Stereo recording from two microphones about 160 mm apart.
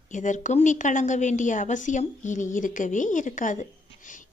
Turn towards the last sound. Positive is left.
turn(degrees=55)  # may be behind; listen again after turning